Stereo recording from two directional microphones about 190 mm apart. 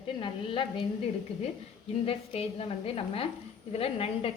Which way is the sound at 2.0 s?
30° left (ahead or behind).